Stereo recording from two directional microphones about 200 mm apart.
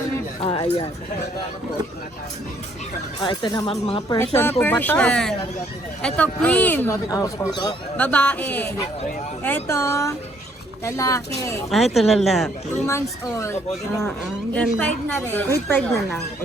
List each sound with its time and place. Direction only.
0.4 s speech: 30° left (ahead or behind)
3.2 s speech: 20° left (ahead or behind)
4.6 s speech: 10° left (ahead or behind)
7.9 s speech: 5° left (ahead or behind)
11.7 s speech: centre (ahead or behind)
12.8 s speech: 15° left (ahead or behind)